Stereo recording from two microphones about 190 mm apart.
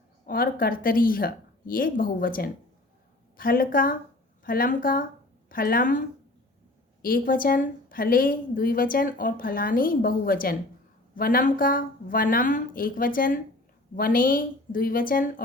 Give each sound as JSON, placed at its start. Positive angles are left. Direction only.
{"t": 0.3, "sound": "speech", "side_deg": 50}
{"t": 7.0, "sound": "speech", "side_deg": 50}